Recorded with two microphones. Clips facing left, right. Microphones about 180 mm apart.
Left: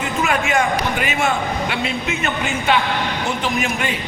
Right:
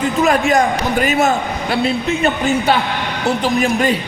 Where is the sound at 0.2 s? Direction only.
40° right (ahead or behind).